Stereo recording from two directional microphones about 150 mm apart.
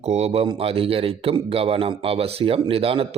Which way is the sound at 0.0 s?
45° right (ahead or behind).